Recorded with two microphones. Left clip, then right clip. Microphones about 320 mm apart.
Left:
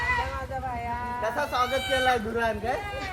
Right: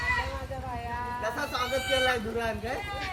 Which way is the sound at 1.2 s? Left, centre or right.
Left.